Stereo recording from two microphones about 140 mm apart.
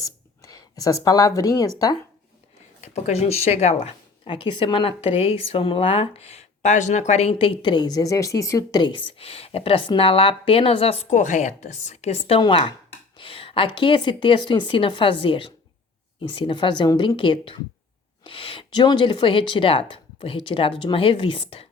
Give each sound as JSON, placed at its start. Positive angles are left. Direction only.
{"t": 0.4, "sound": "speech", "side_deg": 25}
{"t": 2.8, "sound": "speech", "side_deg": 50}
{"t": 4.3, "sound": "speech", "side_deg": 35}
{"t": 12.4, "sound": "speech", "side_deg": 35}